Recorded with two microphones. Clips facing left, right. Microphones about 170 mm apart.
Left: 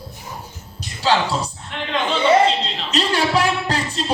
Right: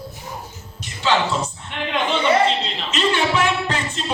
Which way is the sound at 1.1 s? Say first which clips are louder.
Left 1 dB; 35° left (ahead or behind).